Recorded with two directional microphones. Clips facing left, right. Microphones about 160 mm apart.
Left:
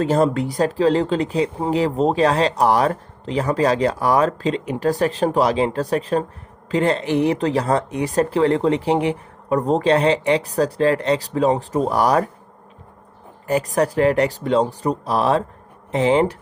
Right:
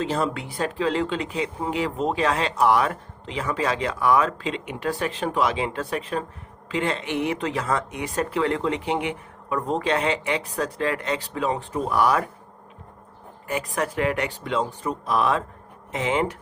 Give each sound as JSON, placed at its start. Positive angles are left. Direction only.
{"t": 0.0, "sound": "speech", "side_deg": 45}
{"t": 13.5, "sound": "speech", "side_deg": 35}